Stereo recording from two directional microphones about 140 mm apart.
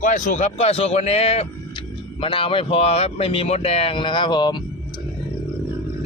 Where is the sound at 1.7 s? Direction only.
35° left (ahead or behind).